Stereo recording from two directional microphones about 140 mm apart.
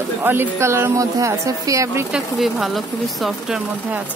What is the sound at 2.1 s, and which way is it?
Speech, centre (ahead or behind).